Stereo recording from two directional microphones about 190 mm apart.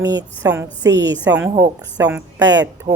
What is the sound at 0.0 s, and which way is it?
A woman's voice, 20° right (ahead or behind).